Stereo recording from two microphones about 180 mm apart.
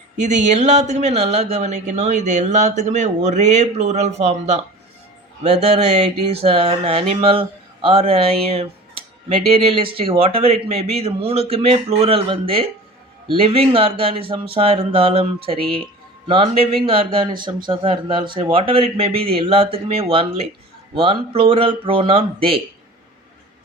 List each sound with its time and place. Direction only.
0.2 s speech: 40° right (ahead or behind)